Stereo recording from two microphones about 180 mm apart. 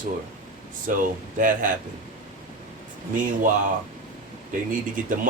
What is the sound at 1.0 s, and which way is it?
Speech, 50° right (ahead or behind).